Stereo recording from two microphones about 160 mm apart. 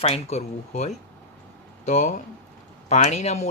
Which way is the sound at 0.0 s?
40° left (ahead or behind).